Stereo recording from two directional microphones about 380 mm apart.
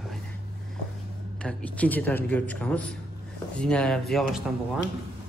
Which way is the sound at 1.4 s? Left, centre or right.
Centre.